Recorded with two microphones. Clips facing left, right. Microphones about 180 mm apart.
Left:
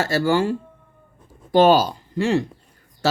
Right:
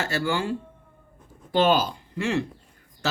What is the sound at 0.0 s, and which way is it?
Speech, 40° left (ahead or behind).